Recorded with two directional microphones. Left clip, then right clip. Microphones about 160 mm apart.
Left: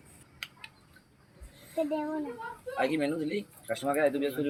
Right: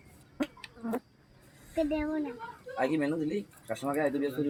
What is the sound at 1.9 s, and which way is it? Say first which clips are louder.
A child's voice: right 1 dB; 45° right (ahead or behind).